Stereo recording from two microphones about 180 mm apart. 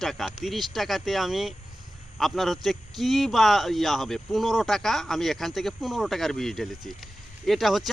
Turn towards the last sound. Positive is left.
turn(degrees=0)  # may be behind; listen again after turning